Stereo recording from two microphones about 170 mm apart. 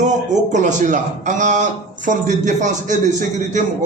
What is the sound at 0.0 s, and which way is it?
A man's voice, 45° right (ahead or behind).